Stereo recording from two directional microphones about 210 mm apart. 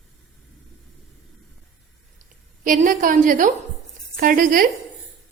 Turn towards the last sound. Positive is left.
turn(degrees=-40)  # may be behind; listen again after turning